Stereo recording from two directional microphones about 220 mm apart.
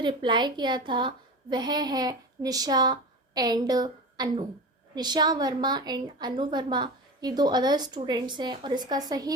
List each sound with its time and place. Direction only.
0.0 s a woman's voice: 20° right (ahead or behind)